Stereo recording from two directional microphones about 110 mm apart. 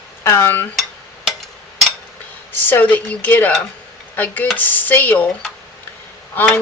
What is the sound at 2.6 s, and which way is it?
Speech, 15° left (ahead or behind).